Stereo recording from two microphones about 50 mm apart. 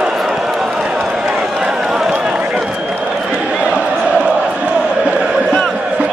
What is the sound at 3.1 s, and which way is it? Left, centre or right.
Crowd, centre.